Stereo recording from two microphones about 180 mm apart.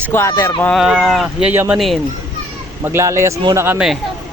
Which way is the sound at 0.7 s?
Centre (ahead or behind).